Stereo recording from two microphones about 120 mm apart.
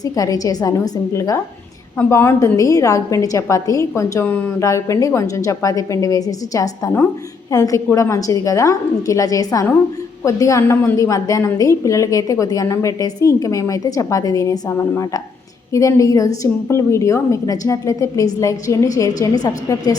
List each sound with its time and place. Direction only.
0.0 s a woman's voice: 30° left (ahead or behind)